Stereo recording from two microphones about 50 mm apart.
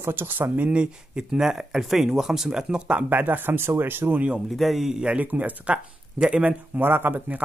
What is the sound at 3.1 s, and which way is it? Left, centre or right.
Speech, right.